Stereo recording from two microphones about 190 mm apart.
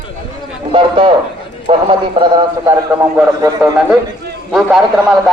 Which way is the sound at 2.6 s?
15° right (ahead or behind).